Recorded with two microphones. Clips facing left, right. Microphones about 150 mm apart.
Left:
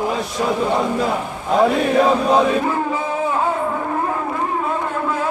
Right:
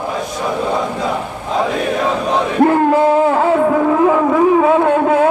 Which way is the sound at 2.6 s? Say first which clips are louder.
Right 10 dB; 70° right (ahead or behind).